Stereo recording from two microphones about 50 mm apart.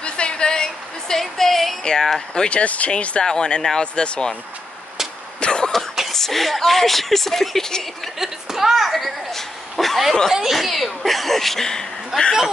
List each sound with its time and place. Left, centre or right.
0.0 s music: centre
1.9 s speech: centre
2.5 s speech: left
5.4 s cough: centre
6.1 s speech: centre
8.2 s speech: centre